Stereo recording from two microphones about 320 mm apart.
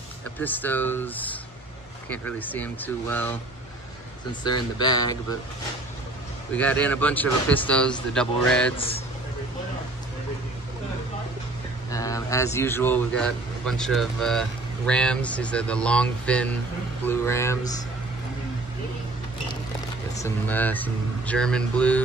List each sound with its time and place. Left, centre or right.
0.4 s a man's voice: centre
6.5 s a man's voice: centre
8.7 s speech: centre
11.9 s a man's voice: centre
20.2 s a man's voice: centre